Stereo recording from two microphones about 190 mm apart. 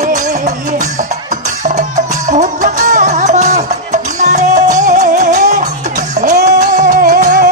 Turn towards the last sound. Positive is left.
turn(degrees=-45)  # may be behind; listen again after turning